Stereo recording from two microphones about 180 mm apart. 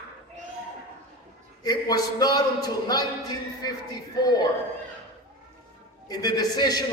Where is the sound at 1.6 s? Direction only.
20° left (ahead or behind).